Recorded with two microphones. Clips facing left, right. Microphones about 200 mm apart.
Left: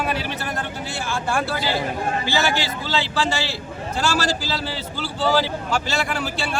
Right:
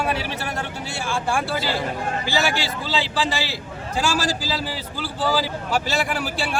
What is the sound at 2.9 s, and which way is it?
A man's voice, 15° right (ahead or behind).